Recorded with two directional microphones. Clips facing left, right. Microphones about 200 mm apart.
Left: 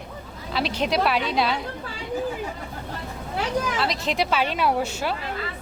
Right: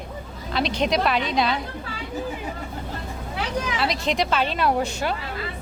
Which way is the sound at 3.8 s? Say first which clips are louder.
Right 1 dB; centre (ahead or behind).